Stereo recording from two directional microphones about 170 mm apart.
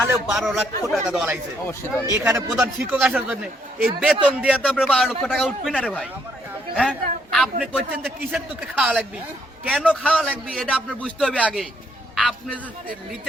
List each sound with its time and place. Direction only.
0.3 s a man's voice: centre (ahead or behind)
2.2 s a man's voice: 15° right (ahead or behind); by 6.1 s centre (ahead or behind)
6.7 s a sound: centre (ahead or behind)
7.6 s a man's voice: 5° right (ahead or behind)